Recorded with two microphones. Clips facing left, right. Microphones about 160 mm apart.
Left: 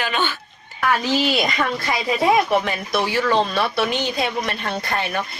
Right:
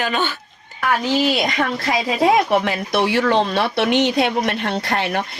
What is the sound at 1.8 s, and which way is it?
A woman's voice, 80° right.